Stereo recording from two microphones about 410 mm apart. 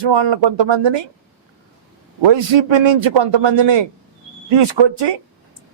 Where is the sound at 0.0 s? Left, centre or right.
Right.